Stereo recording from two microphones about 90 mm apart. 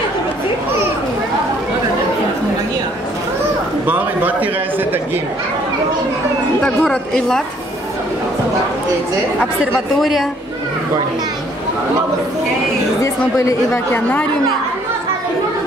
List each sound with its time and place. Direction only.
3.8 s a sound: 20° right (ahead or behind)
6.6 s a woman's voice: 10° left (ahead or behind)
9.9 s speech: centre (ahead or behind)
13.0 s speech: 35° left (ahead or behind)